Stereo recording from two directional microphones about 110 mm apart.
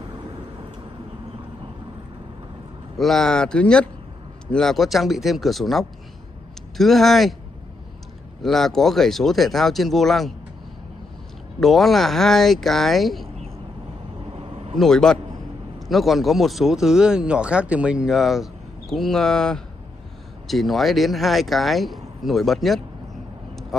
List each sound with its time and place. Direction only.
0.1 s vehicle: 45° right (ahead or behind)
3.0 s speech: 5° left (ahead or behind)
8.4 s speech: 5° left (ahead or behind)
11.6 s speech: centre (ahead or behind)
14.2 s vehicle: 55° right (ahead or behind)
14.8 s speech: 5° left (ahead or behind)